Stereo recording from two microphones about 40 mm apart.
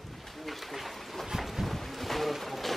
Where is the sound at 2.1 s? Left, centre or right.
Centre.